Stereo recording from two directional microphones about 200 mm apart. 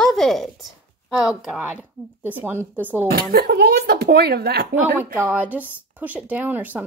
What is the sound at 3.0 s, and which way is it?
Speech, 50° right (ahead or behind).